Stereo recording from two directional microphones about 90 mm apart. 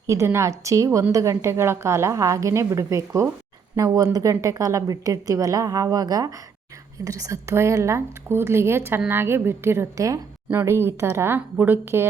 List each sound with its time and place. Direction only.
0.1 s a woman's voice: 30° right (ahead or behind)
3.8 s a woman's voice: 45° right (ahead or behind); by 12.0 s 25° right (ahead or behind)